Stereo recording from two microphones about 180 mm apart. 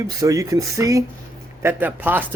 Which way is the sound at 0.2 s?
20° right (ahead or behind).